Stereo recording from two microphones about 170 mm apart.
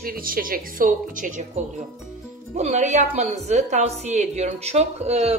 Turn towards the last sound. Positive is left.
turn(degrees=-40)  # may be behind; listen again after turning